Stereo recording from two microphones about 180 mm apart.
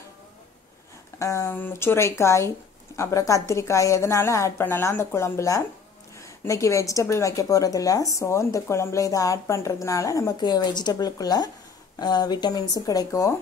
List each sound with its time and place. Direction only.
1.2 s a woman's voice: 15° left (ahead or behind)